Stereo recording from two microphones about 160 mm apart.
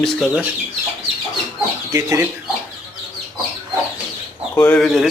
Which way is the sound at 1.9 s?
20° right (ahead or behind).